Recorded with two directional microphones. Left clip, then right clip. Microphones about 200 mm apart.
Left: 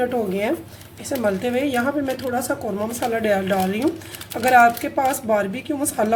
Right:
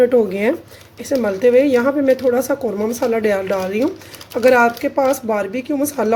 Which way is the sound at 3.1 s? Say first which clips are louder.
Right 1 dB; 40° right (ahead or behind).